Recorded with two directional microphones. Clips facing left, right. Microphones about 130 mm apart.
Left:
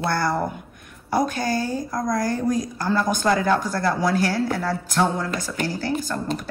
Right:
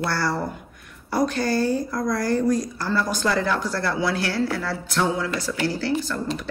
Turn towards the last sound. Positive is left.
turn(degrees=45)  # may be behind; listen again after turning